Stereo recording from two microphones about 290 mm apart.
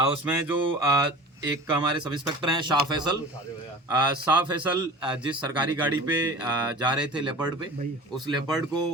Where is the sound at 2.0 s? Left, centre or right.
Centre.